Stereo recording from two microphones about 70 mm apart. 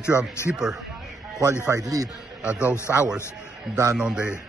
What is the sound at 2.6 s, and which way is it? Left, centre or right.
Speech, left.